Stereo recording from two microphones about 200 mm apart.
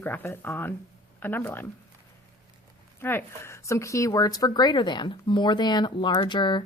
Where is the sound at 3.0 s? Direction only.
10° left (ahead or behind).